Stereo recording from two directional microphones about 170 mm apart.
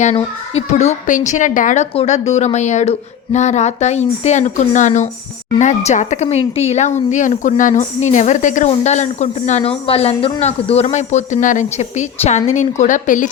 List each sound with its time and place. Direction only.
0.0 s speech: 45° left (ahead or behind)